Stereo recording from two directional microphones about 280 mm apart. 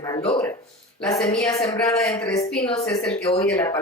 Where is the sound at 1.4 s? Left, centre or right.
Centre.